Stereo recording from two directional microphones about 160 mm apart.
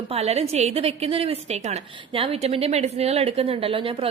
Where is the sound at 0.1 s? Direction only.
40° right (ahead or behind).